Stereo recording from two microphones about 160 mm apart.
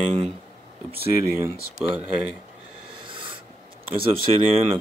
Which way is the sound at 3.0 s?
30° right (ahead or behind).